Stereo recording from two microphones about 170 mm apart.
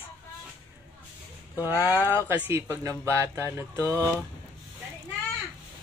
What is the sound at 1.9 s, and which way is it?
A woman's voice, 15° right (ahead or behind).